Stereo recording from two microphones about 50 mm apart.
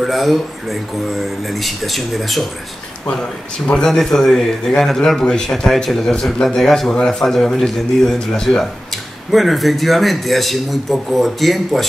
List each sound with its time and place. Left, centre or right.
0.0 s a man's voice: centre
3.1 s a man's voice: centre